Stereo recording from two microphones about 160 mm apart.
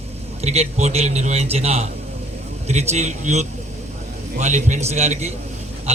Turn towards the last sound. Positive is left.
turn(degrees=-40)  # may be behind; listen again after turning